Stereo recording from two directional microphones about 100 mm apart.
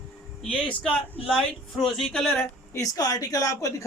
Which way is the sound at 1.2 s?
Centre (ahead or behind).